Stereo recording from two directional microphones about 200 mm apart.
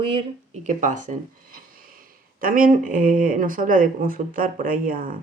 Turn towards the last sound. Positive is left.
turn(degrees=-45)  # may be behind; listen again after turning